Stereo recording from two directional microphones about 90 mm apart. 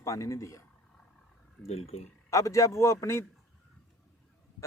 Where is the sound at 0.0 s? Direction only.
35° left (ahead or behind).